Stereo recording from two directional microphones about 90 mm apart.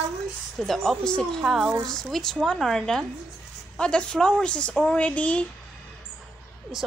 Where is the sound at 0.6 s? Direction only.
Centre (ahead or behind).